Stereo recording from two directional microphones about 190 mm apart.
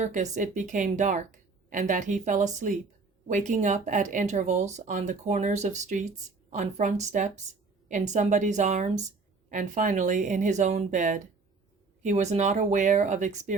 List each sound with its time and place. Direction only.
0.0 s speech: 40° right (ahead or behind)